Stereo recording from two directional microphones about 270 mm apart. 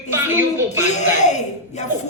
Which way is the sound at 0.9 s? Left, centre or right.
Left.